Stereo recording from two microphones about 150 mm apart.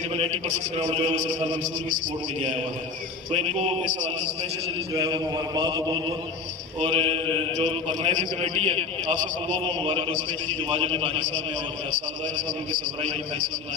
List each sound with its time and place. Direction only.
0.1 s a man's voice: 45° right (ahead or behind)
3.3 s a man's voice: 40° right (ahead or behind)
3.8 s a man's voice: 60° right (ahead or behind)
5.0 s a man's voice: 25° right (ahead or behind); by 8.8 s 40° right (ahead or behind)
9.8 s a man's voice: 35° right (ahead or behind)